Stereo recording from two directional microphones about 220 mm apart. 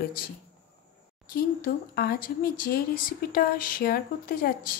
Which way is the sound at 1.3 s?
45° left (ahead or behind).